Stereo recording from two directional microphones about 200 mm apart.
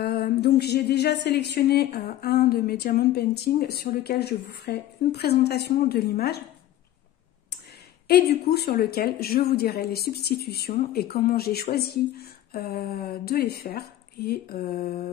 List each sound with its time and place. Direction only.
0.0 s speech: 55° left (ahead or behind)
8.1 s speech: 55° left (ahead or behind)